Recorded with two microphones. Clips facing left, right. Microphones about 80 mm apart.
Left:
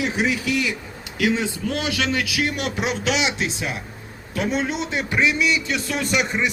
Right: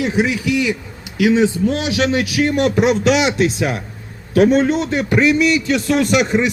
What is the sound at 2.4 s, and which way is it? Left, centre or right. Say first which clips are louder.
Speech: right 9 dB; right.